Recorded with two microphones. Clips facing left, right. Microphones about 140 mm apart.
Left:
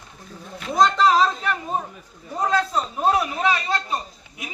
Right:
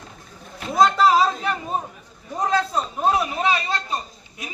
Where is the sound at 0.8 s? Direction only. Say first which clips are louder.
Right 1 dB; 5° right (ahead or behind).